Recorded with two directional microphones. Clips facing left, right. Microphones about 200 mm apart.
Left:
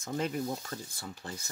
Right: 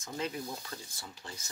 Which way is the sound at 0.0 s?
50° left (ahead or behind).